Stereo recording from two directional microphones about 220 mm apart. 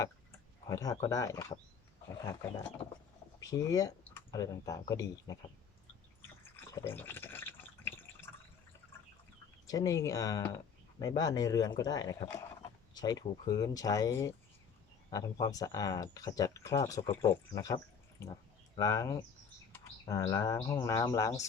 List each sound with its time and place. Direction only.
0.7 s speech: 15° left (ahead or behind)
3.4 s speech: 15° left (ahead or behind)
6.4 s drip: 10° left (ahead or behind)
9.6 s speech: 15° left (ahead or behind)
12.9 s a sound: 15° left (ahead or behind)
13.5 s speech: 15° left (ahead or behind)
18.8 s speech: 15° left (ahead or behind)